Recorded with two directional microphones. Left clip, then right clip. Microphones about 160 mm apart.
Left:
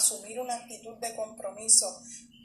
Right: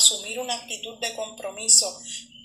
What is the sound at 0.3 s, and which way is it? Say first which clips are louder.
Speech: right 5 dB; 20° right (ahead or behind).